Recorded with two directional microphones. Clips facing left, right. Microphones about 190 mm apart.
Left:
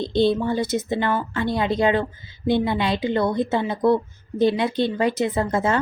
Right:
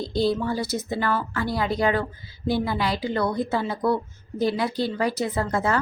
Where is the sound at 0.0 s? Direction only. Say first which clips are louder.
Left 4 dB; 25° left (ahead or behind).